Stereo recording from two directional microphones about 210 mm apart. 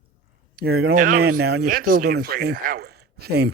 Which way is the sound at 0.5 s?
50° right (ahead or behind).